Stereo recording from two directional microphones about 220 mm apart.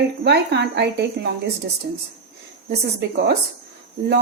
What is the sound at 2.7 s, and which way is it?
Speech, 50° right (ahead or behind).